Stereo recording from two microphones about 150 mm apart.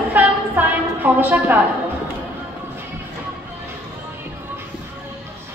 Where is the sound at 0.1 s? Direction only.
10° right (ahead or behind).